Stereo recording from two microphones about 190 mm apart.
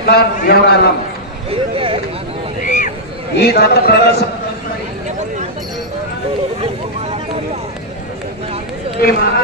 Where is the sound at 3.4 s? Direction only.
60° left (ahead or behind).